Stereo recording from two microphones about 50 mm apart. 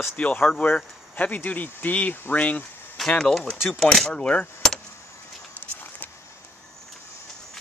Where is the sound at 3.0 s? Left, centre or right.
Centre.